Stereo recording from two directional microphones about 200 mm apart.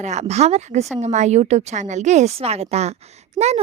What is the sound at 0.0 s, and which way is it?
Speech, 35° right (ahead or behind).